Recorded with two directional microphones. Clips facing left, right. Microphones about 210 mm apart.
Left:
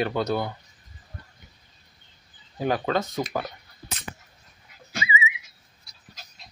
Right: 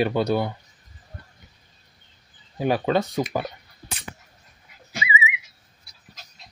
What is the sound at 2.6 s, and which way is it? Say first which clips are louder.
Speech: right 3 dB; 15° right (ahead or behind).